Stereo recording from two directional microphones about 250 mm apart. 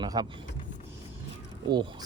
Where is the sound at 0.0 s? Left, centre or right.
Centre.